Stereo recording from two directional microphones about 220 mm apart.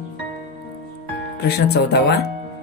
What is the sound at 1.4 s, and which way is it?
Speech, 45° left (ahead or behind).